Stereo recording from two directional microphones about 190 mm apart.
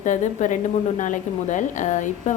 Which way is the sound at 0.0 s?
40° left (ahead or behind).